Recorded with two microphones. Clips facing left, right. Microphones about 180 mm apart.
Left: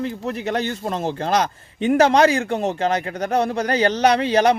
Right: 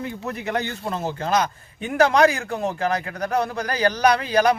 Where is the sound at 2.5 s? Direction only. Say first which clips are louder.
Left 3 dB; 25° left (ahead or behind).